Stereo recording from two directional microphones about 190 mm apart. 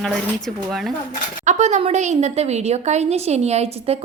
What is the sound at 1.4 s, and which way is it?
A woman's voice, 40° right (ahead or behind).